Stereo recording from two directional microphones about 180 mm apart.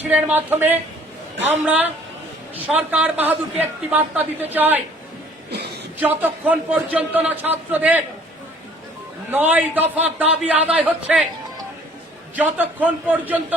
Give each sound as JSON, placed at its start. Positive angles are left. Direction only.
{"t": 0.1, "sound": "a woman's voice", "side_deg": -5}
{"t": 5.5, "sound": "a sound", "side_deg": -65}
{"t": 6.0, "sound": "a woman's voice", "side_deg": -10}
{"t": 9.3, "sound": "a woman's voice", "side_deg": -10}
{"t": 12.4, "sound": "a woman's voice", "side_deg": -10}